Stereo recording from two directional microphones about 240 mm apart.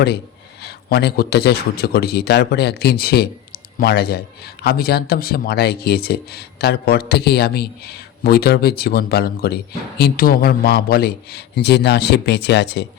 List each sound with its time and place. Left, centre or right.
0.6 s a man's voice: left